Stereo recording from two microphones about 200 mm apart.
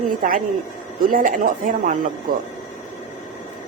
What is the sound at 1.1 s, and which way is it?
A woman's voice, 40° right (ahead or behind).